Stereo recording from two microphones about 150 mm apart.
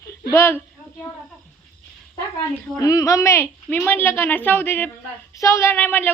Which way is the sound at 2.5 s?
20° left (ahead or behind).